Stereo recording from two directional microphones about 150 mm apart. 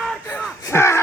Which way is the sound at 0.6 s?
20° left (ahead or behind).